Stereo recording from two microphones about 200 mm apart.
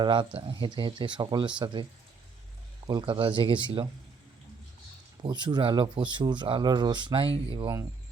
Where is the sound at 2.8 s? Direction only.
20° right (ahead or behind).